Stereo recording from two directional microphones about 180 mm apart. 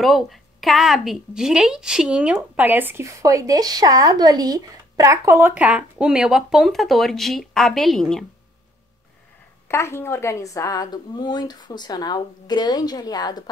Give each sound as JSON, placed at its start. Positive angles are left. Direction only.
{"t": 0.0, "sound": "a woman's voice", "side_deg": 0}
{"t": 9.7, "sound": "a woman's voice", "side_deg": 15}